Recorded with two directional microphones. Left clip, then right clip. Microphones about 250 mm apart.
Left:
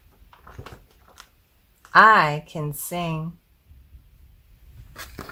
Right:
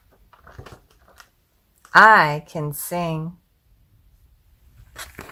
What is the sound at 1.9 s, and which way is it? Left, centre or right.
Speech, right.